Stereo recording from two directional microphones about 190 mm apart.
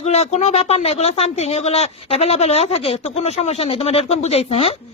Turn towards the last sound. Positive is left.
turn(degrees=30)  # may be behind; listen again after turning